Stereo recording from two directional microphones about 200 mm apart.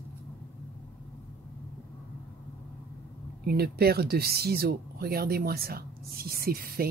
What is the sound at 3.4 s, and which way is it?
Speech, 50° right (ahead or behind).